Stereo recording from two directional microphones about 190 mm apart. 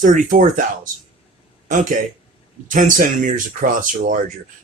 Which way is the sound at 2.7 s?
45° right (ahead or behind).